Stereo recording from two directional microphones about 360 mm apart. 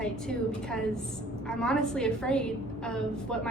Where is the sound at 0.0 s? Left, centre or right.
Centre.